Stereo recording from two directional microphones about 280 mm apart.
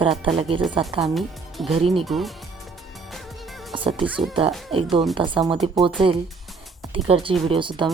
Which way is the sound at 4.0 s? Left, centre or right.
Centre.